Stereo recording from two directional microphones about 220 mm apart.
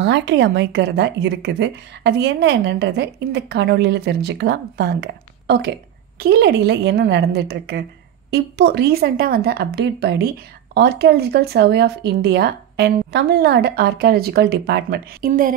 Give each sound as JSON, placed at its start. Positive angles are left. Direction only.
{"t": 0.0, "sound": "a woman's voice", "side_deg": -55}